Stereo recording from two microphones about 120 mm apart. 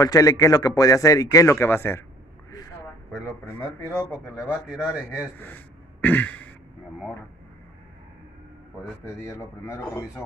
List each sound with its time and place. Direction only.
0.0 s speech: 30° left (ahead or behind)
3.9 s speech: 15° right (ahead or behind)
5.4 s throat clearing: 15° left (ahead or behind)
9.0 s speech: 20° left (ahead or behind)